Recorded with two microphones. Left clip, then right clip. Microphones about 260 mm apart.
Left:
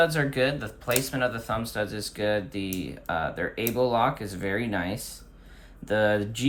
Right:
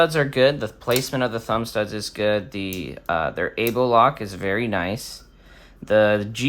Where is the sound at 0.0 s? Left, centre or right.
Right.